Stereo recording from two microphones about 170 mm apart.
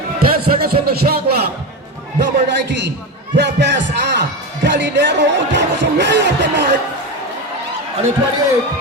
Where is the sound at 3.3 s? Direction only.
90° right.